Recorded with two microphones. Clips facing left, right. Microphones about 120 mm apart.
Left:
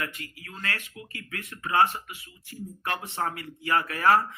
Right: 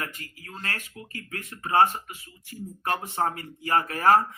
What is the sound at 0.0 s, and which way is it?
Speech, 40° right (ahead or behind).